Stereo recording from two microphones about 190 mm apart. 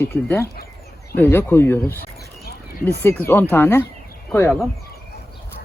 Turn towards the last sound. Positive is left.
turn(degrees=10)  # may be behind; listen again after turning